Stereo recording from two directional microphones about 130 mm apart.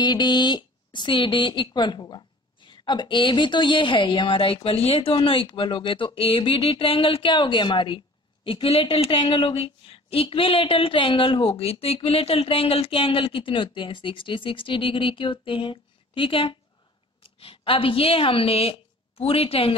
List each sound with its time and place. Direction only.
0.0 s a woman's voice: 35° left (ahead or behind)